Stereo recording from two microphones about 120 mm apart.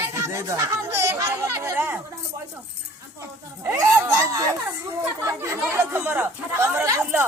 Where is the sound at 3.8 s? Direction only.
30° right (ahead or behind).